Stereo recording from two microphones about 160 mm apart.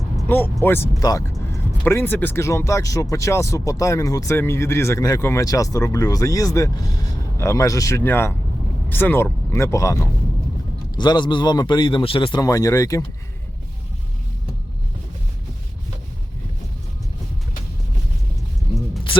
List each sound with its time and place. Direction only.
0.3 s speech: 15° left (ahead or behind)